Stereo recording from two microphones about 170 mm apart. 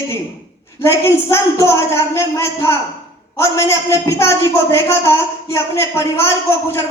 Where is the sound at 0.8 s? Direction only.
15° left (ahead or behind).